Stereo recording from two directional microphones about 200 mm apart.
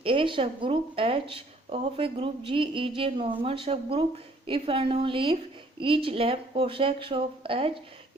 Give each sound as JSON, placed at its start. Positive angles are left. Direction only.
{"t": 0.0, "sound": "speech", "side_deg": -25}